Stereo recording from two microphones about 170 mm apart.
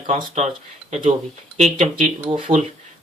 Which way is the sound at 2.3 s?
40° right (ahead or behind).